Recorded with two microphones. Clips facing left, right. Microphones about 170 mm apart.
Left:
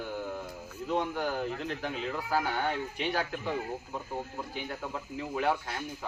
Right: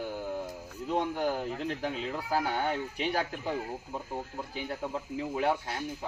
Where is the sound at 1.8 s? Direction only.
35° right (ahead or behind).